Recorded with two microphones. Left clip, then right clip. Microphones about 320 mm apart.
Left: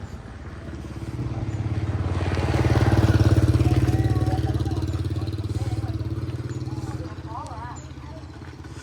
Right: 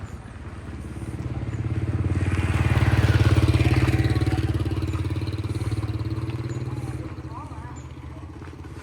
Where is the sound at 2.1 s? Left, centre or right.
Left.